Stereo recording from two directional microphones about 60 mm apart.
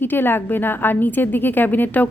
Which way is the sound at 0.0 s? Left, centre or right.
Left.